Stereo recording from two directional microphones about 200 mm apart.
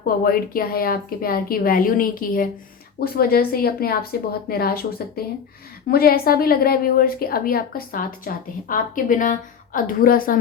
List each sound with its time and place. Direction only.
0.0 s a woman's voice: 45° left (ahead or behind)